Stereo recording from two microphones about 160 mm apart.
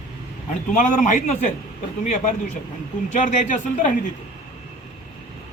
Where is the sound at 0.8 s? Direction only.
50° left (ahead or behind).